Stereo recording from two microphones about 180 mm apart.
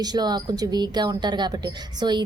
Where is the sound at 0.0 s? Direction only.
20° right (ahead or behind).